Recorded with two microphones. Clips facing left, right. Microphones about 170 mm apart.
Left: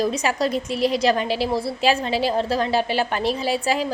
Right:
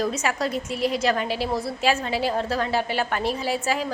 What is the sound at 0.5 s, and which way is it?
Speech, 90° left.